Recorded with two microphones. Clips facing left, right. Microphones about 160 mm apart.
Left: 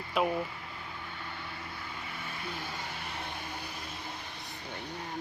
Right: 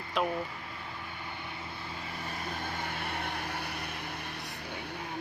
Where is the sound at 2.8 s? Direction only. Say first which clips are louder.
Right 4 dB; 60° right (ahead or behind).